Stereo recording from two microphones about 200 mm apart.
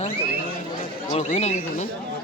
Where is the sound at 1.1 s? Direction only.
35° left (ahead or behind).